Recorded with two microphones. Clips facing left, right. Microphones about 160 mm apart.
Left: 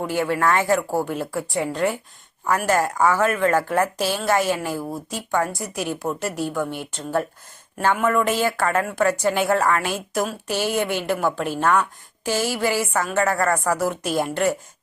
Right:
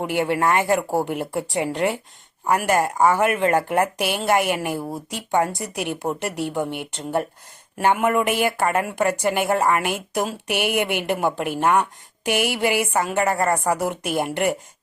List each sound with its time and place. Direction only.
0.0 s speech: 20° right (ahead or behind)